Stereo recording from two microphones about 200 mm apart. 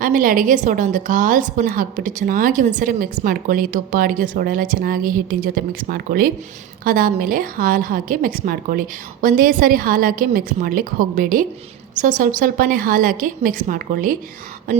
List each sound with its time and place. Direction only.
0.0 s a woman's voice: 40° right (ahead or behind)